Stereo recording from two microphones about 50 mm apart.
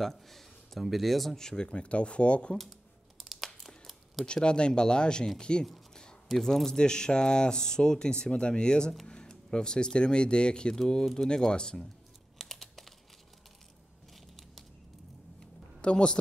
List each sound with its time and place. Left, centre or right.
0.0 s speech: centre
1.7 s speech: left
3.2 s crumpling: centre
4.3 s speech: centre
6.2 s speech: centre
12.4 s typing: centre
15.8 s speech: centre